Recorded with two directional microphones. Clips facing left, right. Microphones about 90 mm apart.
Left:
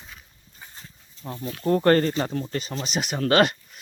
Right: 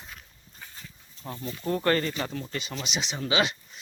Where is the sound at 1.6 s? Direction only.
40° left (ahead or behind).